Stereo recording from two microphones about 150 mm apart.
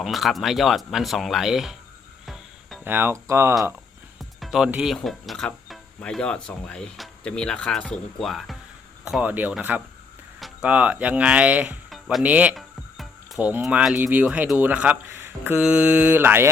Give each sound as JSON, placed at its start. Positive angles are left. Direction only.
{"t": 0.0, "sound": "speech", "side_deg": 0}
{"t": 2.2, "sound": "music", "side_deg": 0}
{"t": 2.8, "sound": "speech", "side_deg": -15}
{"t": 4.2, "sound": "speech", "side_deg": 0}